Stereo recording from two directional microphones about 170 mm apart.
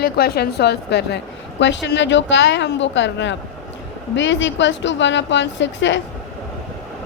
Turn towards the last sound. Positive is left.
turn(degrees=90)